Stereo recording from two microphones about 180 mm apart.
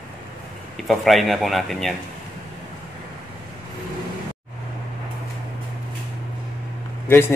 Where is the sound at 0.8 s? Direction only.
Centre (ahead or behind).